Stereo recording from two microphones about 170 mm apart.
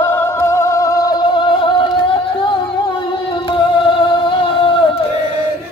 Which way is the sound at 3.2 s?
25° left (ahead or behind).